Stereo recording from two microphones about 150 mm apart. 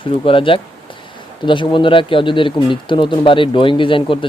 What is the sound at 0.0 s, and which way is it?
Speech, 35° left (ahead or behind).